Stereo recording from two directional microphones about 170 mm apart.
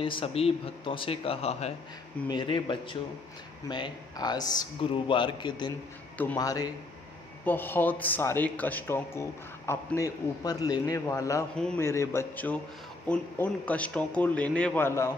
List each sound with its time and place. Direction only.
0.0 s a man's voice: 35° left (ahead or behind); by 15.1 s 15° left (ahead or behind)